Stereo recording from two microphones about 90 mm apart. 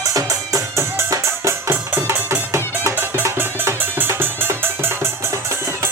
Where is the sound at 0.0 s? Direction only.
40° right (ahead or behind).